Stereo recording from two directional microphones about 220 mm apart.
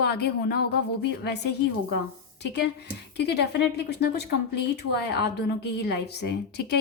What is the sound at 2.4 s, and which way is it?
A woman's voice, 50° left (ahead or behind).